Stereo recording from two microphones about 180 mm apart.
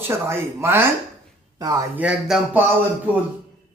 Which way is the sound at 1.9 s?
10° right (ahead or behind).